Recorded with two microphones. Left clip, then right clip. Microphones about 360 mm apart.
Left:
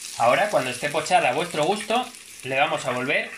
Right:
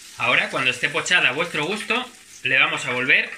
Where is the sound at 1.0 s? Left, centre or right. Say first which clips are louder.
Right 1 dB; centre.